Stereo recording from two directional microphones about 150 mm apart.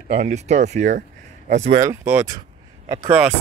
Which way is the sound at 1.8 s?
15° right (ahead or behind).